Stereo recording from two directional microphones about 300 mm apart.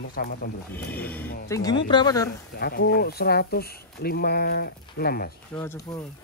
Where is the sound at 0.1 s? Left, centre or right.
Left.